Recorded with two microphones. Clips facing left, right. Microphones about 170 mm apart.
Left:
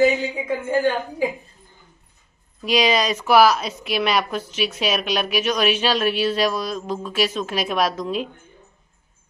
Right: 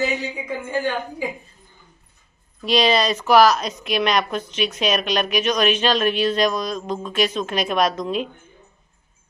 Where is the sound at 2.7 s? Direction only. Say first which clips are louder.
Right 1 dB; 10° left (ahead or behind).